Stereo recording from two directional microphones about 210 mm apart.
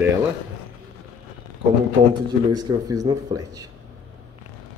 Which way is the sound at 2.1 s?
20° right (ahead or behind).